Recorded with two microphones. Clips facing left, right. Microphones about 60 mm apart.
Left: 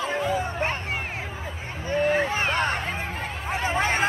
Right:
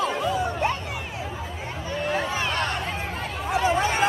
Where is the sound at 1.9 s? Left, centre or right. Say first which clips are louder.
Left 4 dB; left.